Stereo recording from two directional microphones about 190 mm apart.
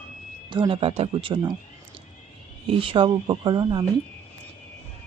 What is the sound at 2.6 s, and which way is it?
Speech, 30° right (ahead or behind).